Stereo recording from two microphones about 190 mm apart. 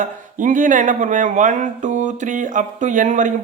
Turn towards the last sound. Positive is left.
turn(degrees=-40)  # may be behind; listen again after turning